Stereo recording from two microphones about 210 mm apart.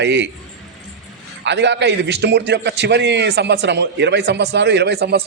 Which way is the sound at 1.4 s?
55° right (ahead or behind).